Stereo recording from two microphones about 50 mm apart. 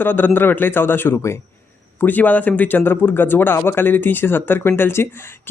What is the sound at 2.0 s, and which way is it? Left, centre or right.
Speech, left.